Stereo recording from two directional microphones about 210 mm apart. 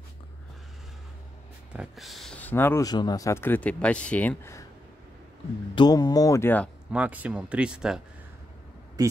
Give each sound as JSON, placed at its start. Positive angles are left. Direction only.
{"t": 1.7, "sound": "speech", "side_deg": -5}
{"t": 5.8, "sound": "speech", "side_deg": 20}
{"t": 6.9, "sound": "speech", "side_deg": -5}
{"t": 9.0, "sound": "speech", "side_deg": -20}